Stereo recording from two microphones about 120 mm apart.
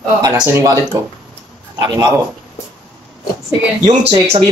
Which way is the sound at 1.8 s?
35° right (ahead or behind).